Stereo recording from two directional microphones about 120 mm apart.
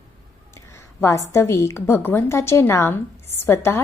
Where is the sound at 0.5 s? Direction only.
20° left (ahead or behind).